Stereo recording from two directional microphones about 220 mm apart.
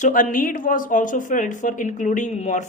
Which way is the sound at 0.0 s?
40° left (ahead or behind).